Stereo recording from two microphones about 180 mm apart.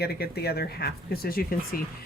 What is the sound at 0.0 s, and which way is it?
Speech, 60° left (ahead or behind).